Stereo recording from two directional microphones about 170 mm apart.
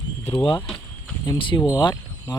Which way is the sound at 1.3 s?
25° left (ahead or behind).